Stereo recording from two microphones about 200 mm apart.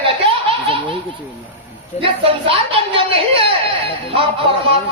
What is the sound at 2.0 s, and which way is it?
Speech, 25° right (ahead or behind).